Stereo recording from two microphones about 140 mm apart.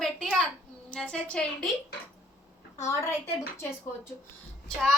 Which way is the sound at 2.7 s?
20° left (ahead or behind).